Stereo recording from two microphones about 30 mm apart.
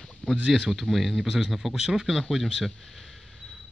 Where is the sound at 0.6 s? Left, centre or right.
Centre.